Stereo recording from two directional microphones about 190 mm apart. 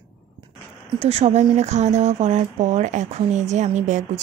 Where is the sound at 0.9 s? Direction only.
35° right (ahead or behind).